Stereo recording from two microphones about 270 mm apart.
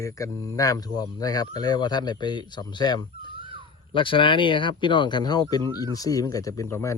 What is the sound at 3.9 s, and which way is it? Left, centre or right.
Speech, centre.